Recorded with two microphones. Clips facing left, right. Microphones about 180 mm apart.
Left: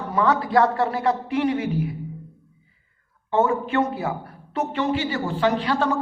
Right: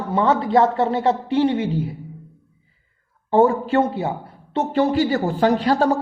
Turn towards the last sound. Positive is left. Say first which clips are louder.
# right 5 dB
turn(degrees=-40)  # may be behind; listen again after turning